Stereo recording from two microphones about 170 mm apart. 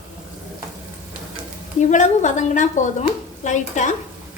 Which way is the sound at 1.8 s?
45° left (ahead or behind).